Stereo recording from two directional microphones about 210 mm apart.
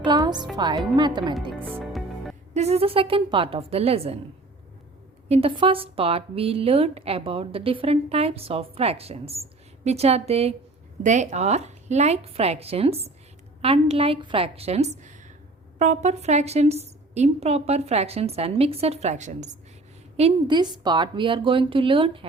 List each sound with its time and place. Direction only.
0.1 s music: 20° right (ahead or behind)
0.5 s speech: 20° right (ahead or behind)
1.5 s music: 10° right (ahead or behind)
2.5 s speech: 30° right (ahead or behind)
5.3 s a woman's voice: 25° right (ahead or behind)